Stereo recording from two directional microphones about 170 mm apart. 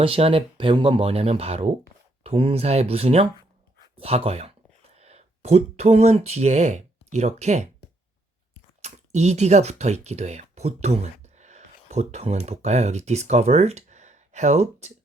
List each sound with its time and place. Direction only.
0.0 s speech: 35° right (ahead or behind)
8.8 s speech: 40° right (ahead or behind)